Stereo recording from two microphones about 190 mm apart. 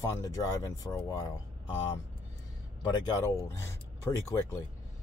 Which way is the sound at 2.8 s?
20° left (ahead or behind).